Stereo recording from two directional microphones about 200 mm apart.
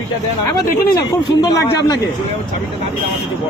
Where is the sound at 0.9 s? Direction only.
20° left (ahead or behind).